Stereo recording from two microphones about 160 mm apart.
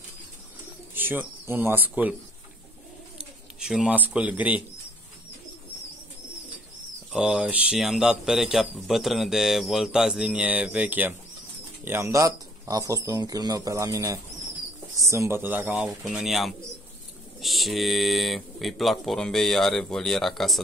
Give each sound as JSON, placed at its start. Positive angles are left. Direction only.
{"t": 0.9, "sound": "speech", "side_deg": -10}
{"t": 3.2, "sound": "speech", "side_deg": -5}
{"t": 7.1, "sound": "speech", "side_deg": -5}